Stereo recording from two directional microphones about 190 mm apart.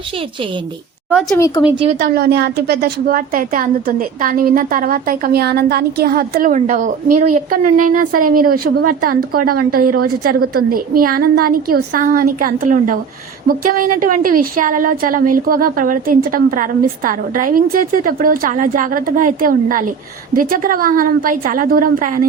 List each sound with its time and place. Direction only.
1.4 s speech: 15° left (ahead or behind)
1.7 s a woman's voice: 30° right (ahead or behind)
2.0 s a woman's voice: 55° right (ahead or behind)